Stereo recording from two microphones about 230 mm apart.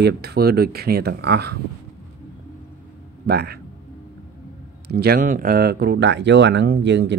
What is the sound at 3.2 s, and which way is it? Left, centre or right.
Speech, right.